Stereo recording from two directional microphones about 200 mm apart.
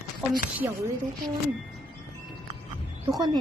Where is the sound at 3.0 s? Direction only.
20° right (ahead or behind).